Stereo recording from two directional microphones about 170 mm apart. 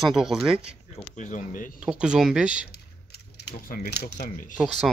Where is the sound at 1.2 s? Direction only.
50° left (ahead or behind).